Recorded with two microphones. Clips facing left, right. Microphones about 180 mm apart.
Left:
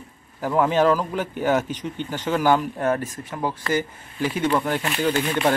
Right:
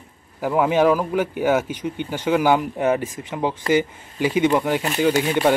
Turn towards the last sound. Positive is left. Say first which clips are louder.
# right 3 dB
turn(degrees=-15)  # may be behind; listen again after turning